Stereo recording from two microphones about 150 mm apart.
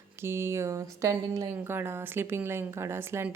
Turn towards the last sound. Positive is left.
turn(degrees=-15)  # may be behind; listen again after turning